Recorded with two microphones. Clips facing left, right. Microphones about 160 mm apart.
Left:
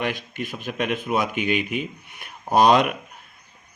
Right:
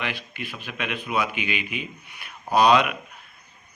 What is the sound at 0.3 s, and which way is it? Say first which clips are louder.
Speech: left 6 dB; 45° left (ahead or behind).